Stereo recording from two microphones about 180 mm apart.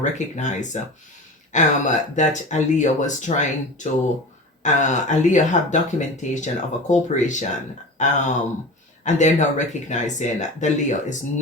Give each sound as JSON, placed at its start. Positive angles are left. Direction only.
{"t": 0.0, "sound": "speech", "side_deg": 40}